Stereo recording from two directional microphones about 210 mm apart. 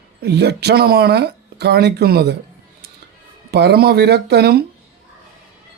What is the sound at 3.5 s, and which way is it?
Speech, 50° right (ahead or behind).